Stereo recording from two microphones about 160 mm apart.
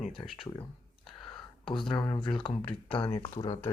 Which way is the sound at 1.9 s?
30° left (ahead or behind).